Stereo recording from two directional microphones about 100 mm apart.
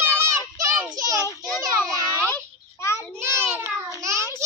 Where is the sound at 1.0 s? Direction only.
35° right (ahead or behind).